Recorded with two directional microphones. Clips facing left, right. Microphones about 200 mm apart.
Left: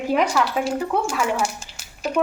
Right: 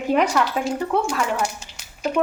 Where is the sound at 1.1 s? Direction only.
5° left (ahead or behind).